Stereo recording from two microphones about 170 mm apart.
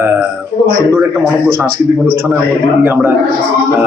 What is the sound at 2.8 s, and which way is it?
Speech, 10° right (ahead or behind).